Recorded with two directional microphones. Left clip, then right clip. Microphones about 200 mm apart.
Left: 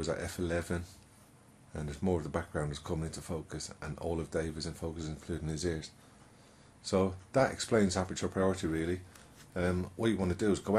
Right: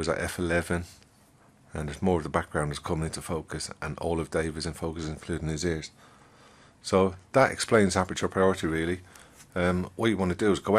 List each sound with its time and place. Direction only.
0.0 s speech: 20° right (ahead or behind)